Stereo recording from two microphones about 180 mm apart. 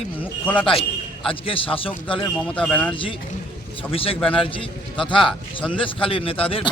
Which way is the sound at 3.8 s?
30° left (ahead or behind).